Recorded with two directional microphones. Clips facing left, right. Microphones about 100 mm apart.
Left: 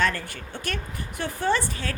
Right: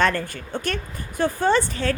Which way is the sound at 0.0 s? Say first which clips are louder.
Right 4 dB; 50° right (ahead or behind).